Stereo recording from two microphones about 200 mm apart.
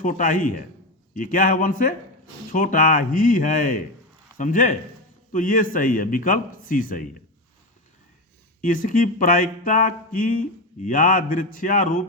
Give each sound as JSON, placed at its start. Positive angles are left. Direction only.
{"t": 0.0, "sound": "a man's voice", "side_deg": 40}
{"t": 8.6, "sound": "speech", "side_deg": 40}